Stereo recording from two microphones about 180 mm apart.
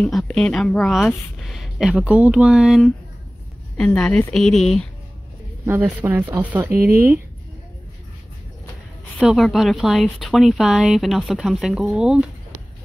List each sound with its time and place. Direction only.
0.0 s speech: 5° left (ahead or behind)
5.7 s speech: 10° right (ahead or behind)
6.7 s speech: 55° right (ahead or behind)
9.2 s speech: centre (ahead or behind)